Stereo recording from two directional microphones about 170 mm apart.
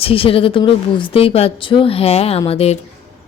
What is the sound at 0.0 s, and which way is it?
A woman's voice, 35° left (ahead or behind).